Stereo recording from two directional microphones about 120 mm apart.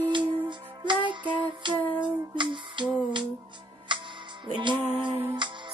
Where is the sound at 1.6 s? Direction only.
40° right (ahead or behind).